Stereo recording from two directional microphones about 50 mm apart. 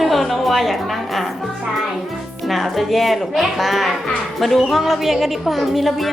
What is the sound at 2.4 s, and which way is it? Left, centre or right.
A woman's voice, centre.